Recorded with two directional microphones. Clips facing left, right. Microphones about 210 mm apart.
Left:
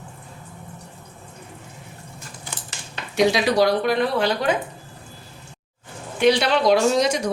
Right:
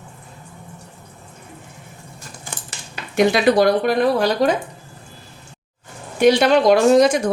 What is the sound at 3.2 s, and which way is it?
Speech, 55° right (ahead or behind).